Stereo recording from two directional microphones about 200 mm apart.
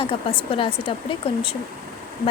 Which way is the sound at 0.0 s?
25° left (ahead or behind).